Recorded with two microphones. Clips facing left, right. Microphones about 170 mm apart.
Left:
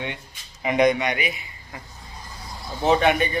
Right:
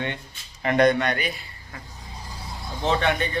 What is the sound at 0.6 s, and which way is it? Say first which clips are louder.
Speech: even; 10° left (ahead or behind).